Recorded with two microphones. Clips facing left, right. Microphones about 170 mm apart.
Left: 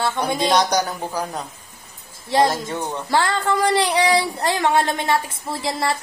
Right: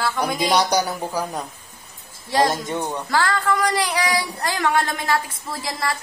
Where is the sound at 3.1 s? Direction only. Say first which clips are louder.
Left 1 dB; 25° left (ahead or behind).